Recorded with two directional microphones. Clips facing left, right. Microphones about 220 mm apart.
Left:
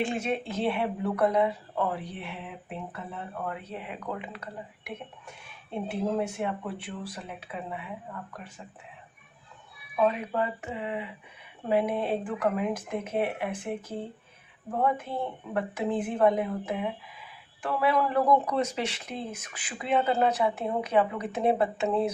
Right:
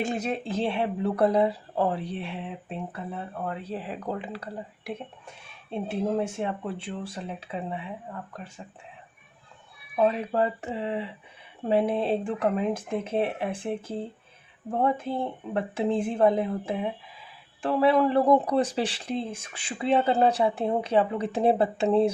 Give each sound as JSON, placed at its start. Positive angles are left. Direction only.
{"t": 0.0, "sound": "speech", "side_deg": -40}
{"t": 9.9, "sound": "speech", "side_deg": -30}